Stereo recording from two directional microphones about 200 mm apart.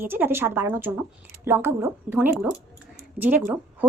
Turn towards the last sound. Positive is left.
turn(degrees=-10)  # may be behind; listen again after turning